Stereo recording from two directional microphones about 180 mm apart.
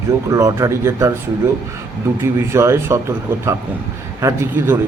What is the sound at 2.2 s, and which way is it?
A man's voice, 15° right (ahead or behind).